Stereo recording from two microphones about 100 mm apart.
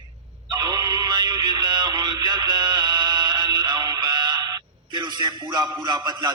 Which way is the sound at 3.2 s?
45° right (ahead or behind).